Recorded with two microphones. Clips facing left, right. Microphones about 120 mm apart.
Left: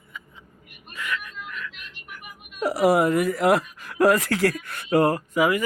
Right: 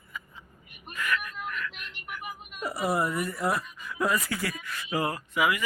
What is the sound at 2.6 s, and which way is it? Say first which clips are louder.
Speech: left 9 dB; 90° left.